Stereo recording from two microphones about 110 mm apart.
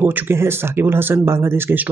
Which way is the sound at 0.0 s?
20° right (ahead or behind).